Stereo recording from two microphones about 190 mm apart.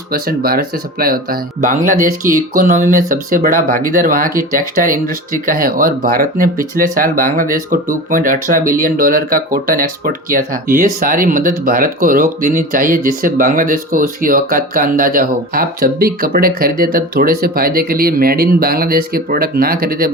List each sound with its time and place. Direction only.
0.1 s speech: 50° right (ahead or behind)